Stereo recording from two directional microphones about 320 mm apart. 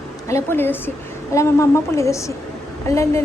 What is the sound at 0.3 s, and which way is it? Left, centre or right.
A woman's voice, centre.